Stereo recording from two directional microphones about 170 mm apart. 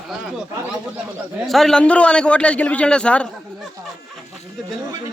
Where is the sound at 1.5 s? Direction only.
Centre (ahead or behind).